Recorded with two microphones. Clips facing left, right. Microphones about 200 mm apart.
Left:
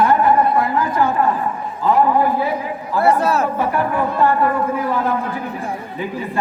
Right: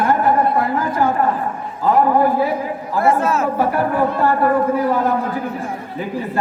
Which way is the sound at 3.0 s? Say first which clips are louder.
Left 1 dB; 35° left (ahead or behind).